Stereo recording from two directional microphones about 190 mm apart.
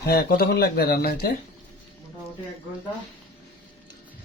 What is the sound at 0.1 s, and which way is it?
Speech, 55° left (ahead or behind).